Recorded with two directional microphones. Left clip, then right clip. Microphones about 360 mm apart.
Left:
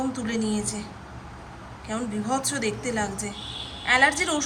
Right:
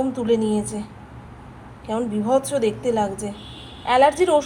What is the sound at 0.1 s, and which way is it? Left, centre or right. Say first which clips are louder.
Speech: right 8 dB; centre.